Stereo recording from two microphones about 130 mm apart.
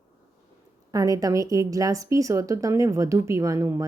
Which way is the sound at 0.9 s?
25° right (ahead or behind).